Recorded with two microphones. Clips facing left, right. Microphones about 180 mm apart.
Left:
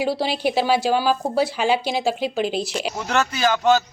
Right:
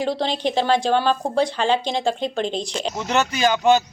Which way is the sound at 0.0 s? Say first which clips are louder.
Left 1 dB; 5° left (ahead or behind).